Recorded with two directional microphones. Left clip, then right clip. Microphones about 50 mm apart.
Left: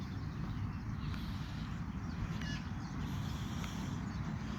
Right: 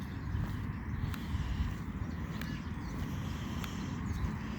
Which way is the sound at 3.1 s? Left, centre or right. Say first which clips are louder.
Right 2 dB; left.